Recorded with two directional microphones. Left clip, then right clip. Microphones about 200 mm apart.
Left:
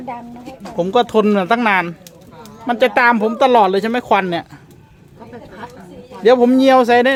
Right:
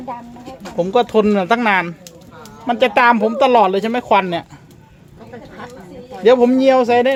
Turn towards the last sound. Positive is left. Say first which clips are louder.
# left 2 dB
turn(degrees=15)  # may be behind; listen again after turning